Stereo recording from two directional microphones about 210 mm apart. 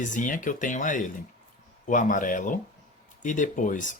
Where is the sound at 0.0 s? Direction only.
40° left (ahead or behind).